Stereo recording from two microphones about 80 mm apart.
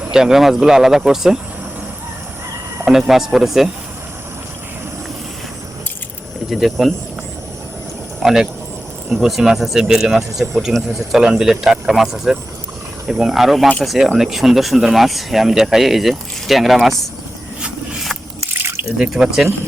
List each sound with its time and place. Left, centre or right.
0.0 s speech: centre
3.1 s speech: centre
6.5 s speech: centre
8.2 s speech: centre
18.5 s drip: right
18.9 s speech: centre